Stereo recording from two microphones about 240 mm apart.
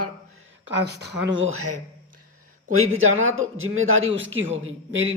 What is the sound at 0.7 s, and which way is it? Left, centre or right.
Speech, right.